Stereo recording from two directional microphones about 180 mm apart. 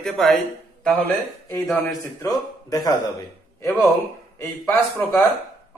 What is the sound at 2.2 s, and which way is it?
Speech, 20° left (ahead or behind).